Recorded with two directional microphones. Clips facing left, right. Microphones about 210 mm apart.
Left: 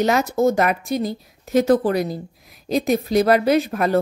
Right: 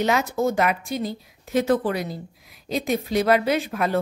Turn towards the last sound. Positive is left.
turn(degrees=40)  # may be behind; listen again after turning